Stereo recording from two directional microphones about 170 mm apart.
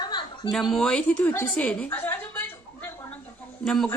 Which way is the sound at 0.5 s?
Centre (ahead or behind).